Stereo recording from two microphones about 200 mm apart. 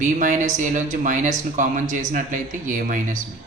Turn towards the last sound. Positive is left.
turn(degrees=-40)  # may be behind; listen again after turning